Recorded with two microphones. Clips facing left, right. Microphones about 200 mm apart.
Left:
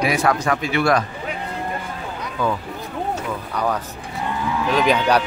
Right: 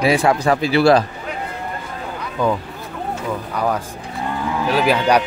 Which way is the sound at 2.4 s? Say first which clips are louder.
Right 4 dB; 20° right (ahead or behind).